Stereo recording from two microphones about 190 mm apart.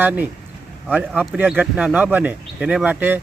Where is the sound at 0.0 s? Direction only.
10° right (ahead or behind).